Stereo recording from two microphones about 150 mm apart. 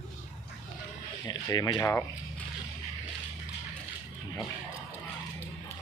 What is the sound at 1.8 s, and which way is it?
Speech, 15° left (ahead or behind).